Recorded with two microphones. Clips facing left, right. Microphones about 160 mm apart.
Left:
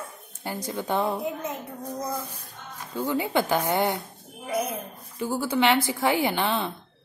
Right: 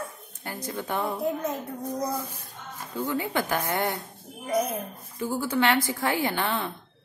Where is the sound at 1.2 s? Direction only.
Centre (ahead or behind).